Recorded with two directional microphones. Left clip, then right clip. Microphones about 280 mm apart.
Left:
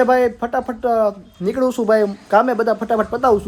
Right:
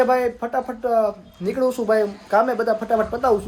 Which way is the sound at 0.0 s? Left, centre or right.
Left.